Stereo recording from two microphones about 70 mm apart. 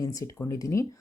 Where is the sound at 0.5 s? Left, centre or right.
Left.